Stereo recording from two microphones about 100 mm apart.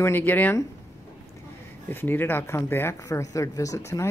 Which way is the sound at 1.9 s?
20° left (ahead or behind).